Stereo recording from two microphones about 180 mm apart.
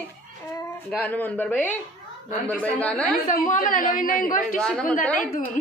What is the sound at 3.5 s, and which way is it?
Speech, 50° left (ahead or behind).